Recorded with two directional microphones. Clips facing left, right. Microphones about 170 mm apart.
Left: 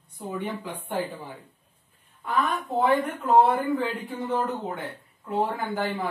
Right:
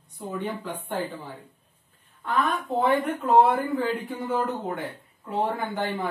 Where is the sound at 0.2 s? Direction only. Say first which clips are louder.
Even; 10° left (ahead or behind).